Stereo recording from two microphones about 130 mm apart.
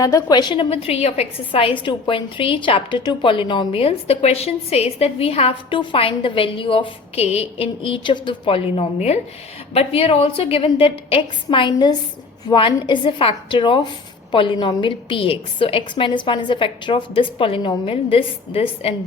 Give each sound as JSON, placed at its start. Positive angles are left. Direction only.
{"t": 0.0, "sound": "a woman's voice", "side_deg": 25}